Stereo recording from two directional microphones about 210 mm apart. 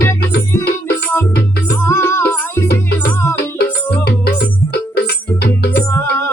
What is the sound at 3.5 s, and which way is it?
Music, 50° left (ahead or behind).